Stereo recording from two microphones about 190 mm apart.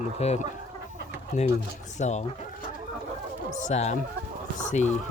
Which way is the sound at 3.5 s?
40° left (ahead or behind).